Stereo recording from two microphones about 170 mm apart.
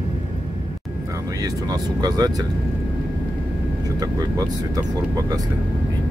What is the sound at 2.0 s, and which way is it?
Speech, 20° right (ahead or behind).